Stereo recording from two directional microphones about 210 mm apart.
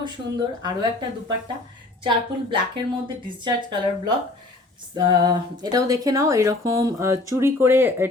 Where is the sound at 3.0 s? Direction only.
20° right (ahead or behind).